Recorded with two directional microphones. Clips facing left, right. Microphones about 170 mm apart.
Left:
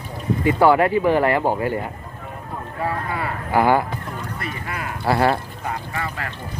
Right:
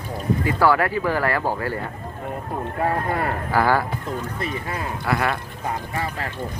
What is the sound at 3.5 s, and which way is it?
Speech, 20° left (ahead or behind).